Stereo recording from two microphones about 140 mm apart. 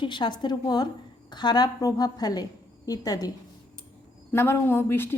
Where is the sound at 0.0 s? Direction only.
35° left (ahead or behind).